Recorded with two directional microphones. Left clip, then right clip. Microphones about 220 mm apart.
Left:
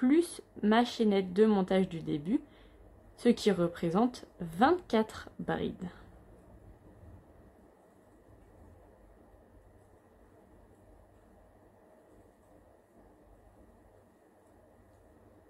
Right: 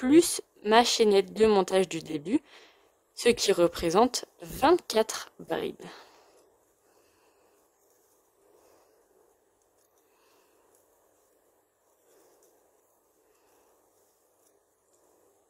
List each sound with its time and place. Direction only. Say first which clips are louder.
0.0 s a woman's voice: right 6 dB; 60° right (ahead or behind)